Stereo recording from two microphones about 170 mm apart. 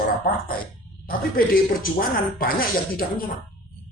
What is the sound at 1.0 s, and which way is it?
Speech, 60° left (ahead or behind).